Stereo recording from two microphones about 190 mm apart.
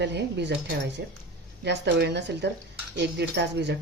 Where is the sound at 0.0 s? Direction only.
65° right (ahead or behind).